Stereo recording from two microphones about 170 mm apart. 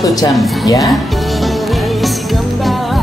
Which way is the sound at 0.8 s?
Centre (ahead or behind).